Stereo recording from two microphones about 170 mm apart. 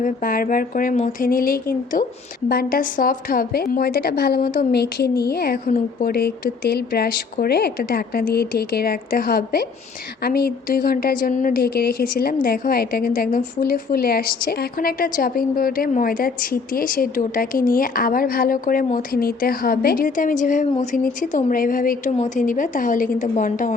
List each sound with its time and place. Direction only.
0.0 s a woman's voice: 55° left (ahead or behind)